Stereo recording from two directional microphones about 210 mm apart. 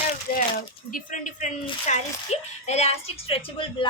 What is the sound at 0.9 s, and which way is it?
A woman's voice, 40° left (ahead or behind).